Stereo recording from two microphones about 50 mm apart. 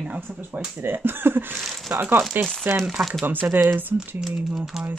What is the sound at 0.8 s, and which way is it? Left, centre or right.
Speech, right.